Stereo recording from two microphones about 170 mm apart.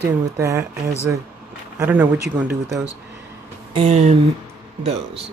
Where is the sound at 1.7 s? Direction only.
10° right (ahead or behind).